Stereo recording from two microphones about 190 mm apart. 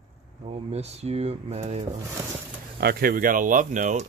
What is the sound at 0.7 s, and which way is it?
Speech, 35° right (ahead or behind).